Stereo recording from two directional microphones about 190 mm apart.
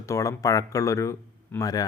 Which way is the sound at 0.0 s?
15° left (ahead or behind).